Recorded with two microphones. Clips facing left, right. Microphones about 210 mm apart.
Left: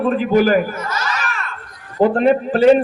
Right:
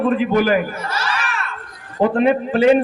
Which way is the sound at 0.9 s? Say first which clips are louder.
Even; 30° right (ahead or behind).